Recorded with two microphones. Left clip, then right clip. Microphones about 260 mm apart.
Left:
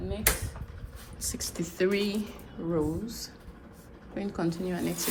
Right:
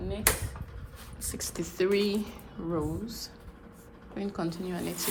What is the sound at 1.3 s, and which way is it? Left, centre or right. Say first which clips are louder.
Speech: right 2 dB; right.